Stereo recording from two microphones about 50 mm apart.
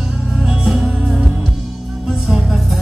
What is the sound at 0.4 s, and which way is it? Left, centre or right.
Music, centre.